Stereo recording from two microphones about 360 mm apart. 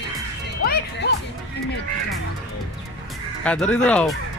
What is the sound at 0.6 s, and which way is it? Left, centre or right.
Speech, left.